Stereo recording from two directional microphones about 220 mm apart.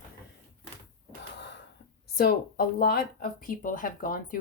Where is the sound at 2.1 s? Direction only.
45° left (ahead or behind).